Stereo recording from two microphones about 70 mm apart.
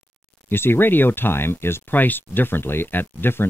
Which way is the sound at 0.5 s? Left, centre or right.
Left.